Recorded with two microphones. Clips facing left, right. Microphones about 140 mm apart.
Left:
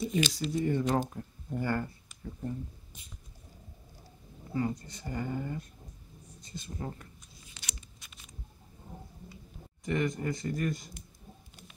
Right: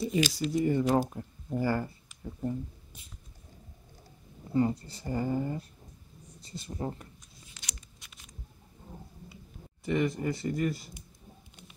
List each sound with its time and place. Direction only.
0.0 s speech: 5° right (ahead or behind)
4.6 s speech: 30° right (ahead or behind)
9.8 s speech: 5° right (ahead or behind)